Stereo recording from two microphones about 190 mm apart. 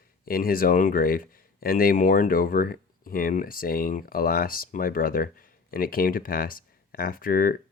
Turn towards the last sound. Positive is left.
turn(degrees=50)  # may be behind; listen again after turning